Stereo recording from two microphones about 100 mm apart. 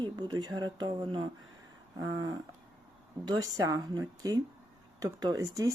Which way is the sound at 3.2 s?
40° right (ahead or behind).